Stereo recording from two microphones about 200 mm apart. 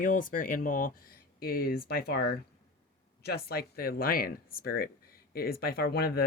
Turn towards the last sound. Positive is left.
turn(degrees=50)  # may be behind; listen again after turning